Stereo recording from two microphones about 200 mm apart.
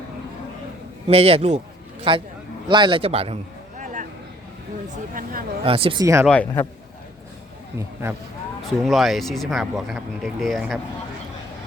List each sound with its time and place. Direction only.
1.0 s a man's voice: 30° right (ahead or behind)
5.1 s speech: 45° right (ahead or behind)
5.6 s a man's voice: 30° right (ahead or behind)
6.2 s speech: 5° left (ahead or behind)
8.0 s speech: 15° right (ahead or behind)
8.6 s speech: centre (ahead or behind)